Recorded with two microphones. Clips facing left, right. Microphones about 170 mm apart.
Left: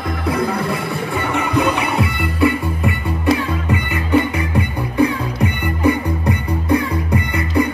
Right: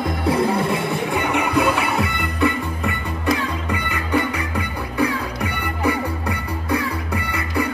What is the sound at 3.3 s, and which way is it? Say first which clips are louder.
Music: left 4 dB; 15° left (ahead or behind).